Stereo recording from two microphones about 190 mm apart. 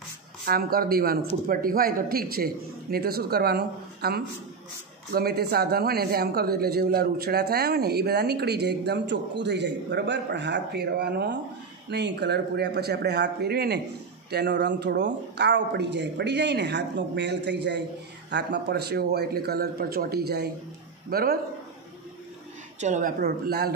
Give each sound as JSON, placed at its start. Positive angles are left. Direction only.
{"t": 0.5, "sound": "a man's voice", "side_deg": -50}
{"t": 22.8, "sound": "a man's voice", "side_deg": -40}